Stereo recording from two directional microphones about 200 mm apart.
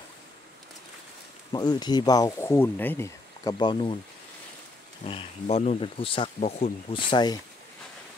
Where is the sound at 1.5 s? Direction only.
20° left (ahead or behind).